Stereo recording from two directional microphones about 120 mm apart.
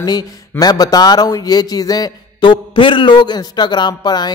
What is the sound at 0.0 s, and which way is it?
Speech, 35° left (ahead or behind).